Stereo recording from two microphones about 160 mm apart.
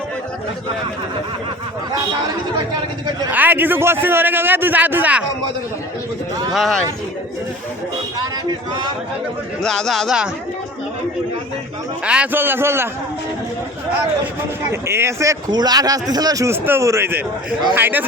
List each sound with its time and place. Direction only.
3.3 s a man's voice: 10° right (ahead or behind)
6.5 s speech: centre (ahead or behind)
8.4 s speech: 30° right (ahead or behind)
9.6 s speech: 5° left (ahead or behind)
12.0 s a man's voice: 10° right (ahead or behind)
14.7 s a man's voice: 15° right (ahead or behind)